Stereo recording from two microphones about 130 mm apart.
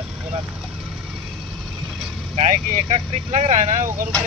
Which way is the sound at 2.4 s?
55° right (ahead or behind).